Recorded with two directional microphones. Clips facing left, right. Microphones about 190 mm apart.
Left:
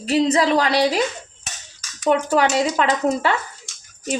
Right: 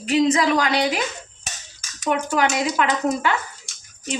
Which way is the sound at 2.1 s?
35° left (ahead or behind).